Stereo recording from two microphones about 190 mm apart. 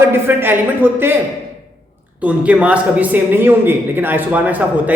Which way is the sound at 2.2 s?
5° right (ahead or behind).